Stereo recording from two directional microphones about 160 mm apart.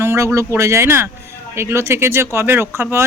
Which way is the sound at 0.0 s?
15° right (ahead or behind).